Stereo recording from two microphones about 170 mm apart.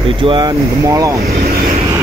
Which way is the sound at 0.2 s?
30° right (ahead or behind).